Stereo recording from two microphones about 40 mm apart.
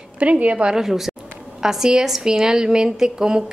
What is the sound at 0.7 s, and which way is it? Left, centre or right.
A woman's voice, centre.